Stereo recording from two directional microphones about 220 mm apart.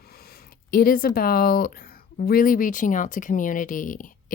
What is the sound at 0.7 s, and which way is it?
A woman's voice, 40° left (ahead or behind).